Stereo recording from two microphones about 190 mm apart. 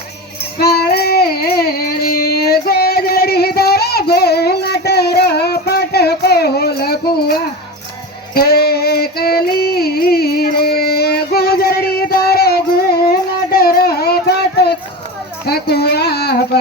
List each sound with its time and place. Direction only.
0.6 s child singing: 55° left (ahead or behind)
8.3 s female singing: 55° left (ahead or behind)
15.4 s a sound: 55° left (ahead or behind)